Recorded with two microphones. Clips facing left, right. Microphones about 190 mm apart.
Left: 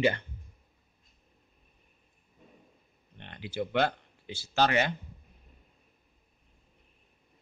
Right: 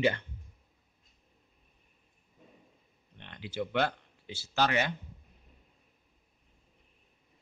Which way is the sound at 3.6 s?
50° left (ahead or behind).